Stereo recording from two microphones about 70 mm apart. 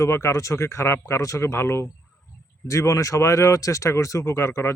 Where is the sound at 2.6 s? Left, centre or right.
Left.